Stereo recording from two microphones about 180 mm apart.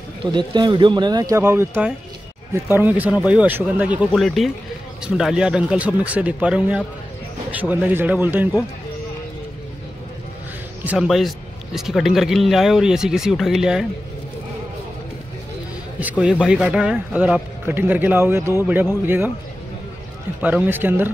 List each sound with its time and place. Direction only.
0.2 s a man's voice: 25° right (ahead or behind); by 8.6 s 10° right (ahead or behind)
10.8 s a man's voice: 5° right (ahead or behind)
16.0 s speech: 5° right (ahead or behind)
20.4 s speech: 10° right (ahead or behind)